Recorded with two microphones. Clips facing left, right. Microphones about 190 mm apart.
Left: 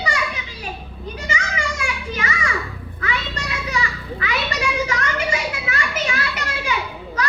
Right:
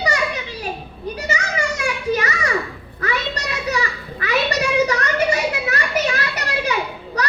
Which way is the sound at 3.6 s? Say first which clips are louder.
Right 3 dB; 40° right (ahead or behind).